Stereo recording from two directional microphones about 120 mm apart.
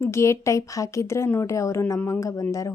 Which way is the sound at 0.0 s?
25° left (ahead or behind).